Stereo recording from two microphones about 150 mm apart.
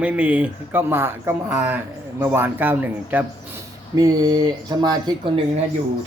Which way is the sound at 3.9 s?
25° right (ahead or behind).